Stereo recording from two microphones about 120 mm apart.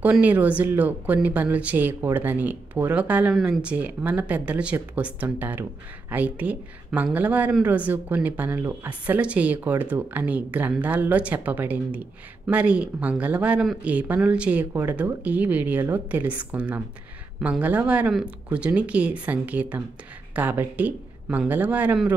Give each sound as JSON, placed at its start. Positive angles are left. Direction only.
{"t": 0.0, "sound": "a woman's voice", "side_deg": -10}